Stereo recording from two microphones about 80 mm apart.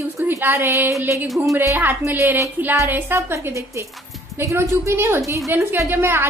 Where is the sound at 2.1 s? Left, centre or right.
Right.